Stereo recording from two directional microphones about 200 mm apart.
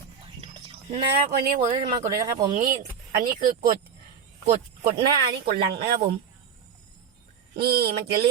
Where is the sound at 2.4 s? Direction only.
40° right (ahead or behind).